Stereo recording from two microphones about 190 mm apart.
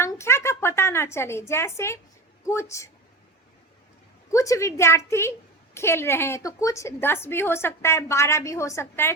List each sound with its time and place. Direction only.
0.0 s a sound: 15° left (ahead or behind)
2.5 s a woman's voice: 15° left (ahead or behind)
4.3 s a woman's voice: 15° left (ahead or behind)